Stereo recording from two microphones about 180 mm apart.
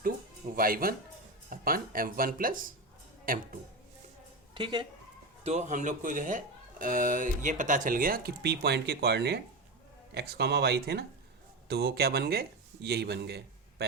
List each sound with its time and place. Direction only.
0.5 s speech: 55° right (ahead or behind)
4.5 s speech: 25° right (ahead or behind)
5.4 s speech: 40° right (ahead or behind); by 13.8 s 65° right (ahead or behind)